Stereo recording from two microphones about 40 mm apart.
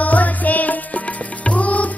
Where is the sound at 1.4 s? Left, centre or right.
Left.